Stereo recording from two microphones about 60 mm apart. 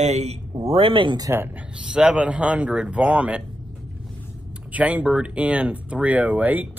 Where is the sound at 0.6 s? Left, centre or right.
Right.